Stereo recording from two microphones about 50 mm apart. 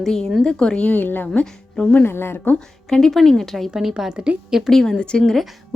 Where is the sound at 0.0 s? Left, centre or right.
Centre.